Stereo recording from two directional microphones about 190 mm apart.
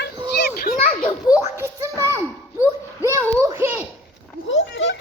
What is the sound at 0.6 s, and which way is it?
Children playing, 40° left (ahead or behind).